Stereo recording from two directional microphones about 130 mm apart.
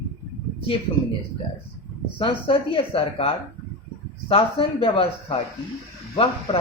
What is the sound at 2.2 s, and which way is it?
Speech, 45° left (ahead or behind).